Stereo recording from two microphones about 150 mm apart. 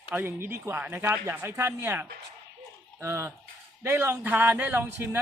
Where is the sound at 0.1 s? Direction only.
15° right (ahead or behind).